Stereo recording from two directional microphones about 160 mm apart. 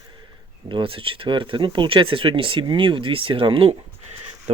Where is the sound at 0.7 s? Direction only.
30° right (ahead or behind).